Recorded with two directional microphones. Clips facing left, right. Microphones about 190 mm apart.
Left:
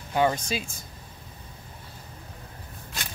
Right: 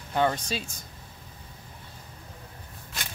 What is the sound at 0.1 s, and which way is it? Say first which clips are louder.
Speech: left 2 dB; 10° left (ahead or behind).